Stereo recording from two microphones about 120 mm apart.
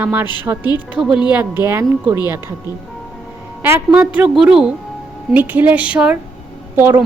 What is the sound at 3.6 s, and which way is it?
A woman's voice, 15° right (ahead or behind).